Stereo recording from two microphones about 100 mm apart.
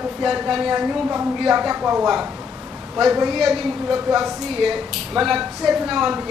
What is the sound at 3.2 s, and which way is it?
A woman's voice, centre (ahead or behind).